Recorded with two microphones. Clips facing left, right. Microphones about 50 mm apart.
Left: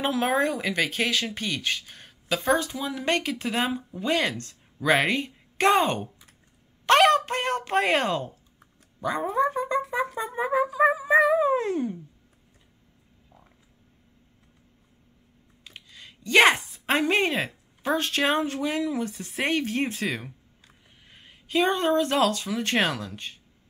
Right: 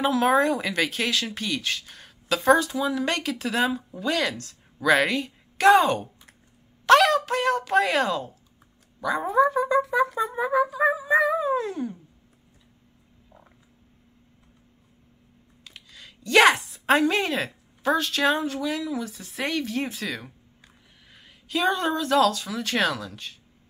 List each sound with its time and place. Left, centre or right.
0.1 s speech: centre; by 8.3 s left
9.2 s cat: centre
10.1 s a sound: left
13.3 s a sound: centre
15.6 s a sound: centre
16.5 s speech: centre
17.9 s speech: left
20.0 s speech: left
21.3 s speech: left